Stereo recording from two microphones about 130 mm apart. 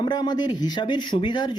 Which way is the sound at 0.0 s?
35° left (ahead or behind).